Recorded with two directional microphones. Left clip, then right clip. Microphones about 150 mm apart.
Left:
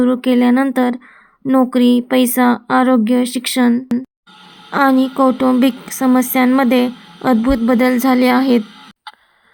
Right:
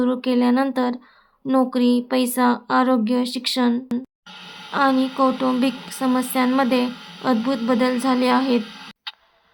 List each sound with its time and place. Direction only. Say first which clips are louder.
0.0 s speech: left 6 dB; 20° left (ahead or behind)